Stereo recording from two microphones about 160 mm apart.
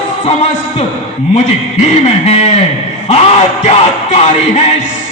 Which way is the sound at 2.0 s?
45° left (ahead or behind).